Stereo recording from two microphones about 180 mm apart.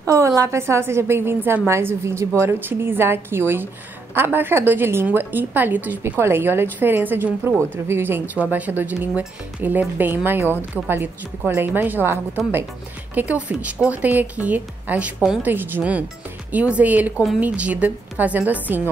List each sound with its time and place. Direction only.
0.0 s a woman's voice: 20° right (ahead or behind)